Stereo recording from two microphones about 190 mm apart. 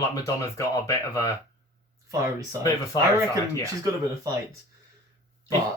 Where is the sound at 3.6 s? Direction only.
20° right (ahead or behind).